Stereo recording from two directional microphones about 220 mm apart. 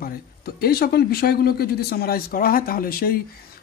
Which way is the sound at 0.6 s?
45° left (ahead or behind).